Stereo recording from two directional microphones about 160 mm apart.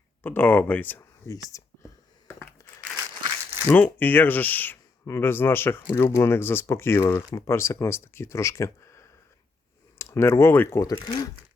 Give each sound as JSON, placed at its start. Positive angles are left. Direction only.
{"t": 0.2, "sound": "speech", "side_deg": 10}
{"t": 3.7, "sound": "speech", "side_deg": 10}